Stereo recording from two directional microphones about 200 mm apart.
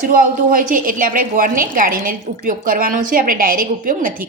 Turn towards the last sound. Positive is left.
turn(degrees=-45)  # may be behind; listen again after turning